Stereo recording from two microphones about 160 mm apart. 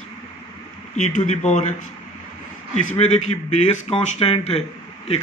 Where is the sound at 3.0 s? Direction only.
40° left (ahead or behind).